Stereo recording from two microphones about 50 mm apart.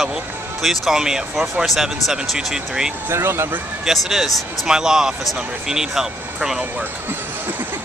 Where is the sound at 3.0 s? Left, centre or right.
Right.